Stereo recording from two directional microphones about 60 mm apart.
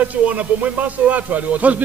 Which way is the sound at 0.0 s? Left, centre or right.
Right.